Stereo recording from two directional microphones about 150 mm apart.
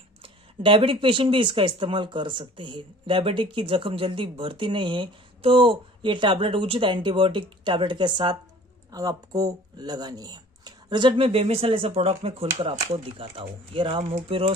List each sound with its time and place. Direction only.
0.2 s speech: 35° right (ahead or behind)